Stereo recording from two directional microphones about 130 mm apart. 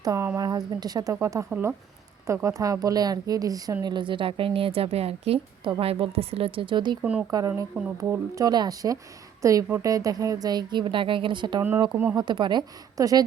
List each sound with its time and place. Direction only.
0.0 s speech: 25° right (ahead or behind)
1.5 s speech: 10° right (ahead or behind)
2.2 s speech: 25° right (ahead or behind)
7.0 s speech: 10° right (ahead or behind)
7.3 s speech: 30° right (ahead or behind)